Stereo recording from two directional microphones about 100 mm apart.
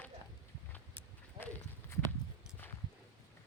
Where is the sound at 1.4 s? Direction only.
20° left (ahead or behind).